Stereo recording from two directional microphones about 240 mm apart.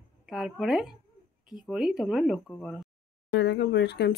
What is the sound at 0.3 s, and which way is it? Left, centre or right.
Speech, centre.